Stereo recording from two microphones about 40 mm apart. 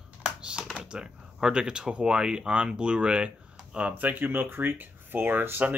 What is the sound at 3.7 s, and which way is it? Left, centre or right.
Speech, right.